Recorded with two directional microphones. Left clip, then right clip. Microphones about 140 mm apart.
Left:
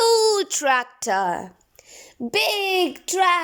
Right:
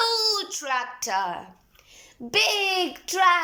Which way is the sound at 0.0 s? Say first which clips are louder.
Left 6 dB; 60° left (ahead or behind).